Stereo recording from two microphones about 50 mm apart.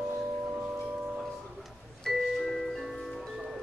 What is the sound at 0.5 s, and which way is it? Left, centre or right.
Singing bowl, right.